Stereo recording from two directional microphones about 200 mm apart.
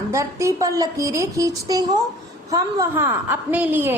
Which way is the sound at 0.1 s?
15° right (ahead or behind).